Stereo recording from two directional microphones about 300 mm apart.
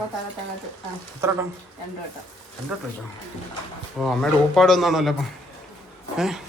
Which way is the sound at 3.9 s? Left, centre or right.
Centre.